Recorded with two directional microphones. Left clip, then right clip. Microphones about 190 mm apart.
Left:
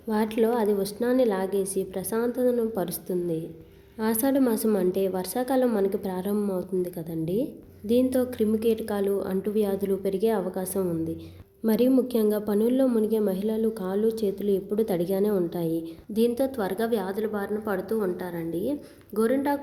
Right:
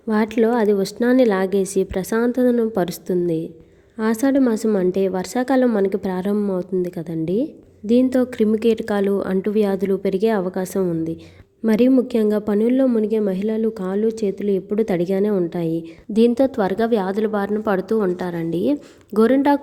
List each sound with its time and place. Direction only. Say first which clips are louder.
0.1 s a woman's voice: right 6 dB; 40° right (ahead or behind)